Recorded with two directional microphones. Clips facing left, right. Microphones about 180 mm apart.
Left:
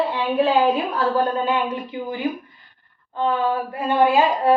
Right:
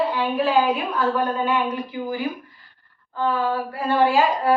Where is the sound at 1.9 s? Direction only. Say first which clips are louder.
Left 1 dB; 25° left (ahead or behind).